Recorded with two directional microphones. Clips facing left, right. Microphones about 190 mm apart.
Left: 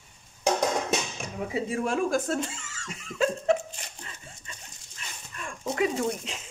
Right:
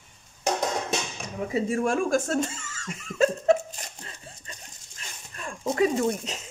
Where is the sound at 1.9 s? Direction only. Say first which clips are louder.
Right 2 dB; 45° right (ahead or behind).